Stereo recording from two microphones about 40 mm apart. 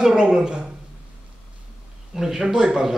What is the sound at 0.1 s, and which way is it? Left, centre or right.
Speech, centre.